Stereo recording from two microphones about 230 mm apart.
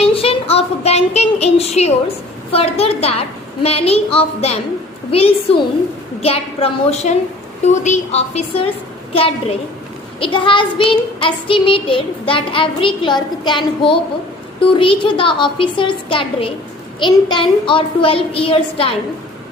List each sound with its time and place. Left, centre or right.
0.0 s child singing: left